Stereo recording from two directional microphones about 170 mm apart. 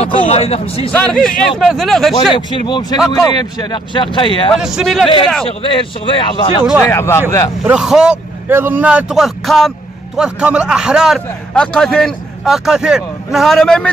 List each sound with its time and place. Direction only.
0.0 s speech: 40° left (ahead or behind)
0.9 s a man's voice: 5° left (ahead or behind)
2.3 s speech: 30° left (ahead or behind)
4.5 s a man's voice: centre (ahead or behind)
5.0 s speech: 30° left (ahead or behind)
6.8 s speech: 15° left (ahead or behind)
7.6 s a man's voice: 5° right (ahead or behind)